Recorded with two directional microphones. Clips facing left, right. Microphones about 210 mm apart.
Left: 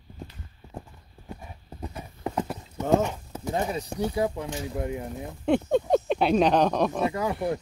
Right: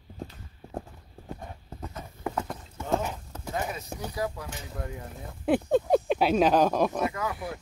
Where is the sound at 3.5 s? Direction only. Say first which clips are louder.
Left 5 dB; 30° left (ahead or behind).